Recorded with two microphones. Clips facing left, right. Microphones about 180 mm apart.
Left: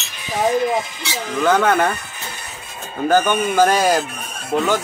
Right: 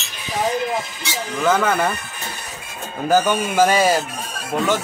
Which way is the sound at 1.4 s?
5° right (ahead or behind).